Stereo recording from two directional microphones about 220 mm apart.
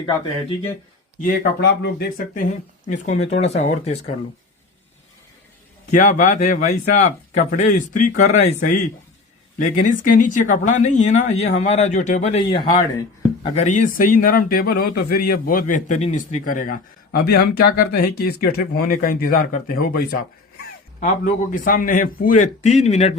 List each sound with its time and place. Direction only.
1.8 s speech: 45° left (ahead or behind)
5.9 s speech: 35° left (ahead or behind)
21.0 s speech: 35° left (ahead or behind)